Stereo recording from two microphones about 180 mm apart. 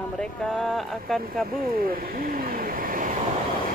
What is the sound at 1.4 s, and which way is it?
Speech, 55° right (ahead or behind).